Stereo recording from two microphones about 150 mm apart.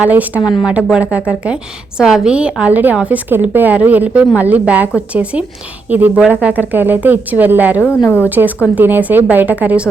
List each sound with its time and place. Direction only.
0.0 s a woman's voice: 10° right (ahead or behind)
7.9 s a woman's voice: 15° left (ahead or behind)
8.6 s a woman's voice: 10° right (ahead or behind)